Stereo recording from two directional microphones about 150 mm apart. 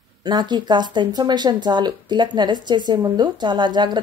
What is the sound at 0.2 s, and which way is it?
A woman's voice, 30° right (ahead or behind).